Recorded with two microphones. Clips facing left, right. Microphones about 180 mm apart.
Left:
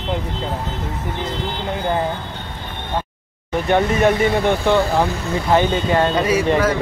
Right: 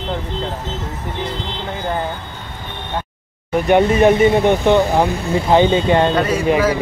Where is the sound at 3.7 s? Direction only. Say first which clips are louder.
Right 4 dB; 20° right (ahead or behind).